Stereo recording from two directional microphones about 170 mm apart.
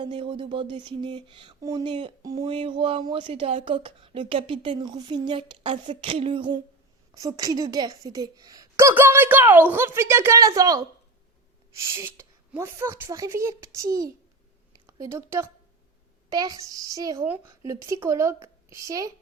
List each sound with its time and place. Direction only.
0.0 s speech: 30° right (ahead or behind)
11.9 s a woman's voice: 15° right (ahead or behind)